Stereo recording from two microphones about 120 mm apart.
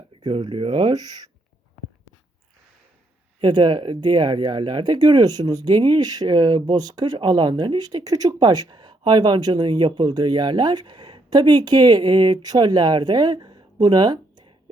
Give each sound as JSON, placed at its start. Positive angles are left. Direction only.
{"t": 0.2, "sound": "speech", "side_deg": -40}
{"t": 3.4, "sound": "speech", "side_deg": -35}